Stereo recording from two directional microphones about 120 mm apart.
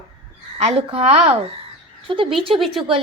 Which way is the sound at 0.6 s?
70° right (ahead or behind).